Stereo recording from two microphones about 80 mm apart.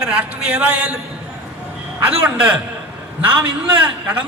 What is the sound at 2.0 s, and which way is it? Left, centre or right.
Speech, centre.